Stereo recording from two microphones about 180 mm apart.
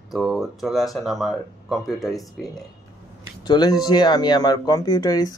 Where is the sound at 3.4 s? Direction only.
20° left (ahead or behind).